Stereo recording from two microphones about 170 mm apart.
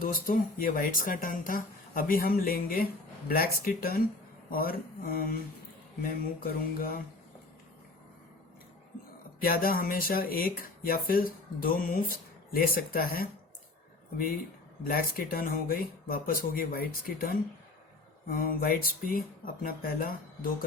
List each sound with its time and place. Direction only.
0.0 s speech: 60° left (ahead or behind)
9.4 s speech: 60° left (ahead or behind)
14.8 s speech: 60° left (ahead or behind)